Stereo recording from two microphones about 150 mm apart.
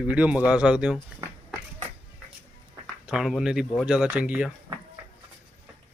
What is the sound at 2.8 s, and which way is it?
Speech, centre (ahead or behind).